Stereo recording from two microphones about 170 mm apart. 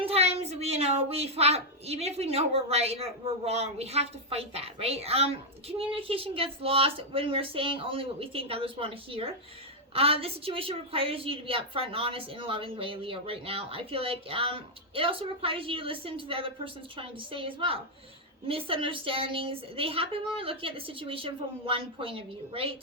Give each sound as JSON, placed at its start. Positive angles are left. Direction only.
{"t": 0.0, "sound": "a child's voice", "side_deg": -35}